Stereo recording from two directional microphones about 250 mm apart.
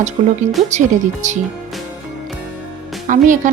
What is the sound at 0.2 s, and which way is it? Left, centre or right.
A woman's voice, right.